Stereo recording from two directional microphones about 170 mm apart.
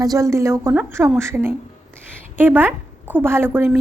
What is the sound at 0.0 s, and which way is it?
A woman's voice, 20° right (ahead or behind).